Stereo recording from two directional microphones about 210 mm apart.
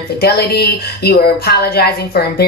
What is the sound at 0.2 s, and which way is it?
Speech, 50° left (ahead or behind).